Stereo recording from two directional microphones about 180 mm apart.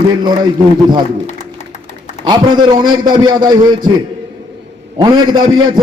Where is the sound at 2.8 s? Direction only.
25° right (ahead or behind).